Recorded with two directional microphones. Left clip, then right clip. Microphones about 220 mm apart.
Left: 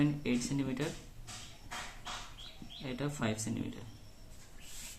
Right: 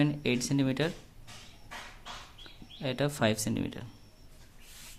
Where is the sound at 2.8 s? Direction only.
50° right (ahead or behind).